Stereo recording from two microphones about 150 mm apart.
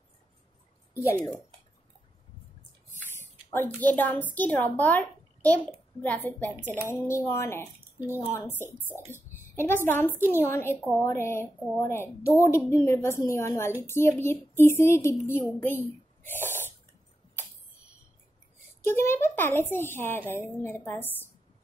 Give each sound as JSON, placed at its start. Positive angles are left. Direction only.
{"t": 2.9, "sound": "a woman's voice", "side_deg": 15}
{"t": 6.5, "sound": "speech", "side_deg": -10}
{"t": 7.1, "sound": "speech", "side_deg": 20}
{"t": 16.2, "sound": "whispering", "side_deg": 15}
{"t": 18.8, "sound": "speech", "side_deg": 15}